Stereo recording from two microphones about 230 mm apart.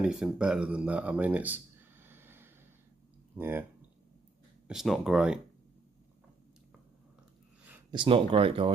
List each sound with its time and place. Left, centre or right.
0.0 s speech: centre
4.6 s speech: centre
7.9 s speech: right